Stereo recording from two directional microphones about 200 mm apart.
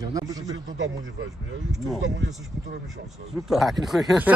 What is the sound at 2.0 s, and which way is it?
Speech, 65° right (ahead or behind).